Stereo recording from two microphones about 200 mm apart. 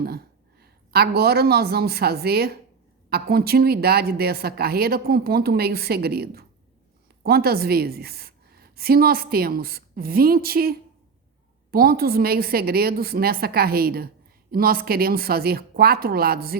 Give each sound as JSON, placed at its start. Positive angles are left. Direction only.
{"t": 0.6, "sound": "a woman's voice", "side_deg": -50}